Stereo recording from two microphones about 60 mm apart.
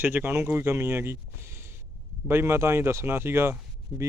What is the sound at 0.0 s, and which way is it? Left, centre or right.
Speech, right.